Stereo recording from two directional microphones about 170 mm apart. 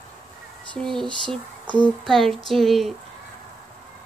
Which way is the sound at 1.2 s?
10° left (ahead or behind).